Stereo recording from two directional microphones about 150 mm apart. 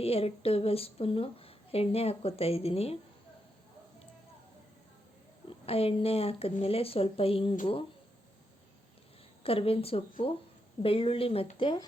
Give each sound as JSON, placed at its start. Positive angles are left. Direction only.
{"t": 0.0, "sound": "a woman's voice", "side_deg": 40}
{"t": 5.5, "sound": "a woman's voice", "side_deg": 40}
{"t": 9.4, "sound": "a woman's voice", "side_deg": 40}